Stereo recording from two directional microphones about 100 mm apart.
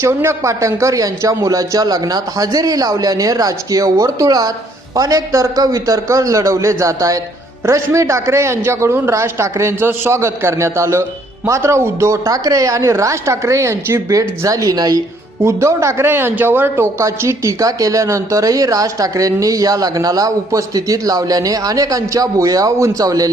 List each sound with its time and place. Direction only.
0.0 s a man's voice: 25° right (ahead or behind)